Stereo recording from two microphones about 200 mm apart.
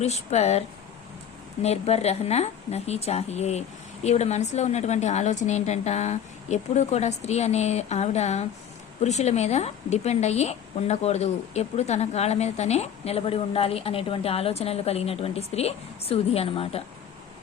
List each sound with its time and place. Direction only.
0.0 s a woman's voice: 35° left (ahead or behind)
1.6 s a woman's voice: 30° left (ahead or behind)